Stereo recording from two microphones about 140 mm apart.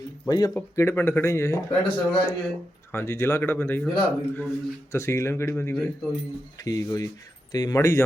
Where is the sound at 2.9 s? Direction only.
20° left (ahead or behind).